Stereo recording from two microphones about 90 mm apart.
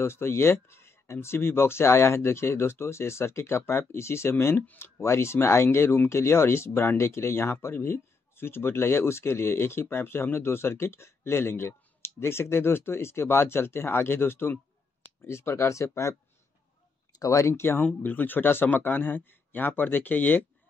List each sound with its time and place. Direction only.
0.0 s speech: 30° left (ahead or behind)